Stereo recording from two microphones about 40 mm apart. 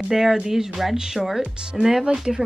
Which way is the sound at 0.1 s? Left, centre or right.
Centre.